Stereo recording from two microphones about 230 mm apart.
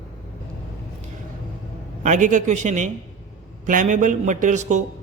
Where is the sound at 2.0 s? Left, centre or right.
Right.